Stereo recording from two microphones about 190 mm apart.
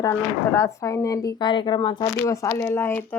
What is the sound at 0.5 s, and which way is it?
A woman's voice, 15° left (ahead or behind).